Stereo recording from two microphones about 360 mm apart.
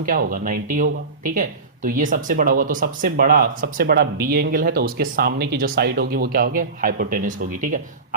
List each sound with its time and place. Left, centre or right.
0.0 s speech: right